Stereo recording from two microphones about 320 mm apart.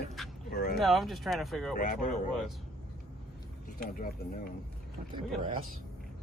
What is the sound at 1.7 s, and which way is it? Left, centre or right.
Speech, left.